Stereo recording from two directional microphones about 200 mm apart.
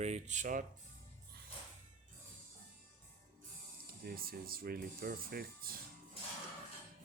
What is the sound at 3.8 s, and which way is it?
Speech, 50° right (ahead or behind).